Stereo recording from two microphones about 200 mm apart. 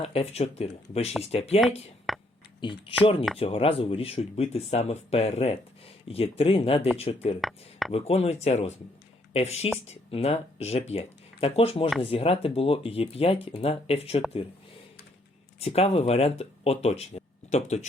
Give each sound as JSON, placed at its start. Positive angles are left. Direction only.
{"t": 0.0, "sound": "speech", "side_deg": 30}
{"t": 2.1, "sound": "a sound", "side_deg": 0}
{"t": 2.6, "sound": "speech", "side_deg": 25}
{"t": 7.4, "sound": "speech", "side_deg": 0}
{"t": 7.9, "sound": "speech", "side_deg": 30}
{"t": 15.6, "sound": "speech", "side_deg": 30}